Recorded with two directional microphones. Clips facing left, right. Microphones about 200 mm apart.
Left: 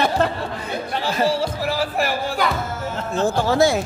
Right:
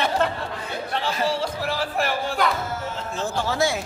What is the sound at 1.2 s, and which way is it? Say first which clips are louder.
Speech: left 4 dB; 5° left (ahead or behind).